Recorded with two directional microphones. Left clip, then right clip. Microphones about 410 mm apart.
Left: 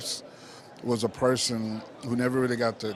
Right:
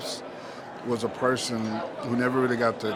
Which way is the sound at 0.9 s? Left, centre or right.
Left.